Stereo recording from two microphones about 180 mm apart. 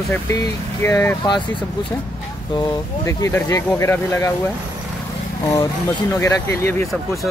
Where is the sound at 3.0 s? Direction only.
15° left (ahead or behind).